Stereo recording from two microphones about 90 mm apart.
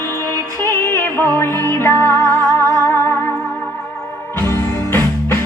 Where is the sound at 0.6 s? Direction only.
30° left (ahead or behind).